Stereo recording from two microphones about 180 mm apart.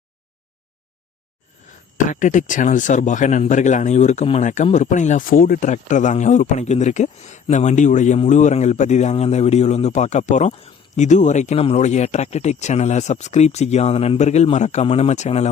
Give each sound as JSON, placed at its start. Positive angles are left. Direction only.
{"t": 2.0, "sound": "speech", "side_deg": 45}